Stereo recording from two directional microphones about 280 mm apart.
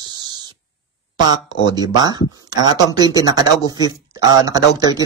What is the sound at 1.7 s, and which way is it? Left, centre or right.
Speech, centre.